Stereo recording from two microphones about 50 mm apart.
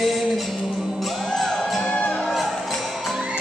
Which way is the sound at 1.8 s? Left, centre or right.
Centre.